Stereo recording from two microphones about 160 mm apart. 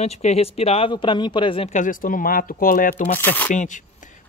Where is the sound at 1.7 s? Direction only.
55° left (ahead or behind).